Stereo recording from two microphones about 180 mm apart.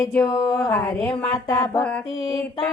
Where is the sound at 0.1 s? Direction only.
5° left (ahead or behind).